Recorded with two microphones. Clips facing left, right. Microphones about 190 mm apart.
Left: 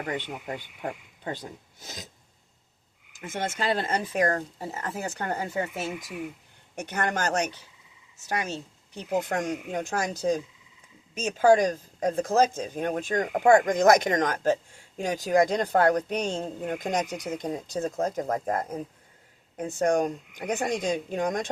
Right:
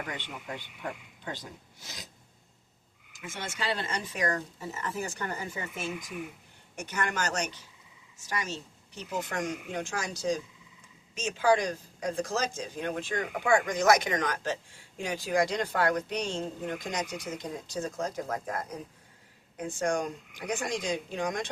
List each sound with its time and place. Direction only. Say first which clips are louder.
1.2 s speech: left 6 dB; 55° left (ahead or behind)
3.2 s speech: left 7 dB; 55° left (ahead or behind)